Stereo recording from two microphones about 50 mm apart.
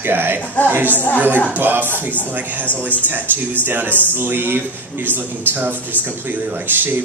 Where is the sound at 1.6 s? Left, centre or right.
Right.